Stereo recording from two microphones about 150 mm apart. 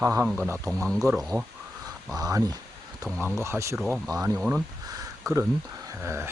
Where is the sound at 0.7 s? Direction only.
5° left (ahead or behind).